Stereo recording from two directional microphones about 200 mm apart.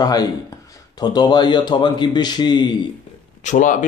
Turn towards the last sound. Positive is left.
turn(degrees=40)  # may be behind; listen again after turning